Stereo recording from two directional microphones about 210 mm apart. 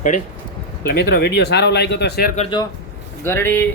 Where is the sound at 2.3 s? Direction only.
25° left (ahead or behind).